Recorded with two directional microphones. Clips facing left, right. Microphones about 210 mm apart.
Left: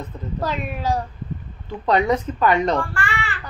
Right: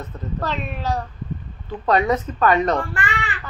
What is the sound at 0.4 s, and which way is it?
Child singing, 10° left (ahead or behind).